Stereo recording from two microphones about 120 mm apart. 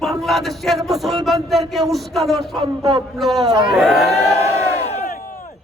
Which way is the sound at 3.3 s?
30° right (ahead or behind).